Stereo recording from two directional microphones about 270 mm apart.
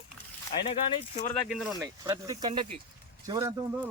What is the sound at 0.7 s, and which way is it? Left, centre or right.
Speech, left.